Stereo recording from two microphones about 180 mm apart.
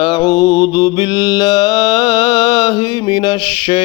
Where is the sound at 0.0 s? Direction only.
25° left (ahead or behind).